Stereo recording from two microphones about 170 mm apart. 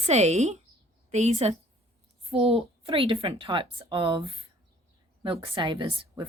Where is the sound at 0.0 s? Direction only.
40° right (ahead or behind).